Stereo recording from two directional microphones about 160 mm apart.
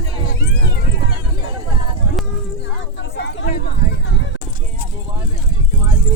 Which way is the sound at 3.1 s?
80° left.